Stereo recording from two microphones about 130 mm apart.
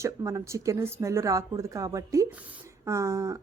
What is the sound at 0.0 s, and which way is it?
A woman's voice, 25° right (ahead or behind).